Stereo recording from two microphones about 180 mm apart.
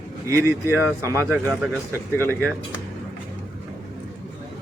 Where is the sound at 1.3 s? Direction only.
Centre (ahead or behind).